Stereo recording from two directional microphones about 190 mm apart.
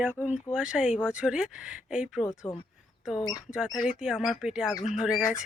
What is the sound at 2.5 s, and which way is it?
Speech, 25° left (ahead or behind).